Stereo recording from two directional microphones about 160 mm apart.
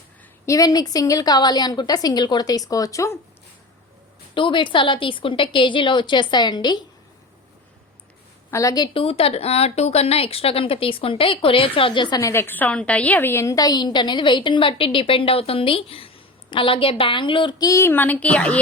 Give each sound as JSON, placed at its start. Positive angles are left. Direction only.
{"t": 0.4, "sound": "a woman's voice", "side_deg": 20}
{"t": 4.4, "sound": "a woman's voice", "side_deg": 30}
{"t": 8.4, "sound": "a woman's voice", "side_deg": 20}
{"t": 12.2, "sound": "a woman's voice", "side_deg": 15}